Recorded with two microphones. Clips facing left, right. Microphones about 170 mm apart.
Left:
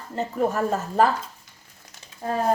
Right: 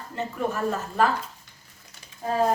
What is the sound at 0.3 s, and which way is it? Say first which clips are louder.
Speech: left 4 dB; 40° left (ahead or behind).